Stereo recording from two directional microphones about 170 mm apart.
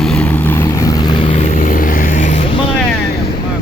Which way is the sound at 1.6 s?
50° left (ahead or behind).